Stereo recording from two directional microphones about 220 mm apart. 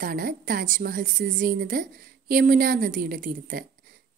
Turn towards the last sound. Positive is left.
turn(degrees=-40)  # may be behind; listen again after turning